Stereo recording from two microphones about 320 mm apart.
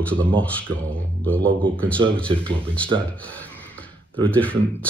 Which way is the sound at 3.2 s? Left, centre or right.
Centre.